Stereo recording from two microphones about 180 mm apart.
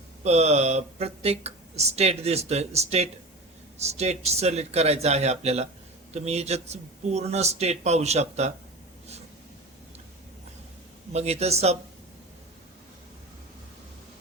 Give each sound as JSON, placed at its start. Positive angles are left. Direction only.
{"t": 0.3, "sound": "speech", "side_deg": -35}
{"t": 11.1, "sound": "speech", "side_deg": -35}